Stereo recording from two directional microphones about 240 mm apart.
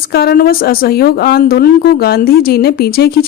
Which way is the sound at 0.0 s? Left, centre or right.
Left.